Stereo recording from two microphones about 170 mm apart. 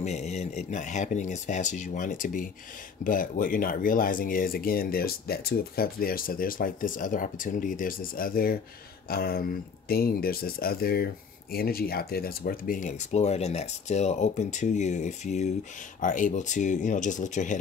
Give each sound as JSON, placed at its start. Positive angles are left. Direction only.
{"t": 0.0, "sound": "speech", "side_deg": 40}